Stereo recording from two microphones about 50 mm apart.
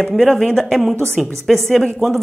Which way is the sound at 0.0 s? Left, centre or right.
Centre.